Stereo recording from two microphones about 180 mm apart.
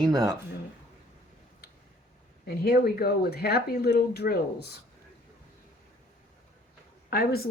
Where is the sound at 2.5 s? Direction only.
60° left (ahead or behind).